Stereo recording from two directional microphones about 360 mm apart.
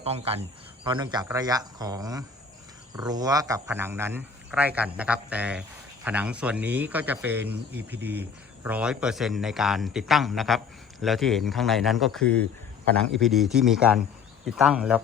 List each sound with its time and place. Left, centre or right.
0.0 s a man's voice: centre